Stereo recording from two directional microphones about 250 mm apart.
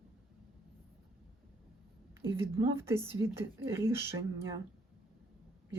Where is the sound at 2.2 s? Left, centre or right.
Centre.